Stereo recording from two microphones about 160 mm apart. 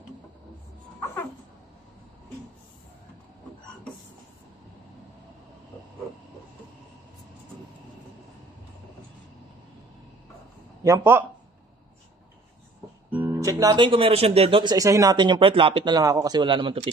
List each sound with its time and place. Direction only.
10.8 s a man's voice: 15° right (ahead or behind)
13.1 s speech: 15° right (ahead or behind); by 16.9 s 35° right (ahead or behind)